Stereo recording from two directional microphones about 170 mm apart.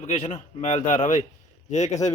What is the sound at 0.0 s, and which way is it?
A man's voice, 45° left (ahead or behind).